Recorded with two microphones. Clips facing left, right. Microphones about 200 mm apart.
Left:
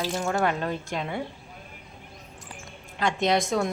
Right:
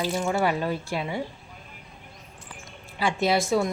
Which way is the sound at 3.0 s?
5° right (ahead or behind).